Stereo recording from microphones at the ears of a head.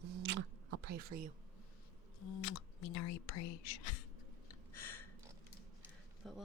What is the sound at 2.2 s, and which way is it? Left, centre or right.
Speech, left.